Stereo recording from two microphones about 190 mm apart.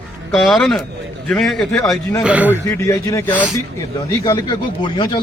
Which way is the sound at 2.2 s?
10° right (ahead or behind).